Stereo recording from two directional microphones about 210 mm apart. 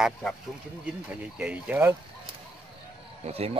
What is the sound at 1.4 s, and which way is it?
Speech, 5° right (ahead or behind).